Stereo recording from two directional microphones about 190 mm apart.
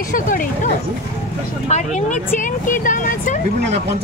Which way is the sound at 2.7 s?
45° left (ahead or behind).